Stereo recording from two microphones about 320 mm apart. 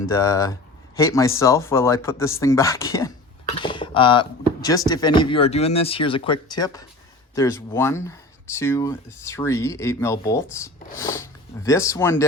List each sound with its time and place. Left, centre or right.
0.0 s speech: centre